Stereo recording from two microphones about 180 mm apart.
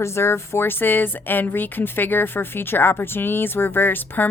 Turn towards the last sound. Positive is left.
turn(degrees=10)  # may be behind; listen again after turning